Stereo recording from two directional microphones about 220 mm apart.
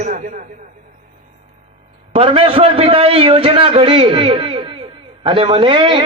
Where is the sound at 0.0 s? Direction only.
35° right (ahead or behind).